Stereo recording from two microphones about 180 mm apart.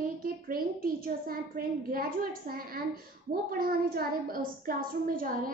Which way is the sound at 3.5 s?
55° right (ahead or behind).